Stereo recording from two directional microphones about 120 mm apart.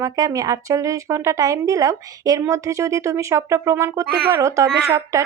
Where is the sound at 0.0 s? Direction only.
30° right (ahead or behind).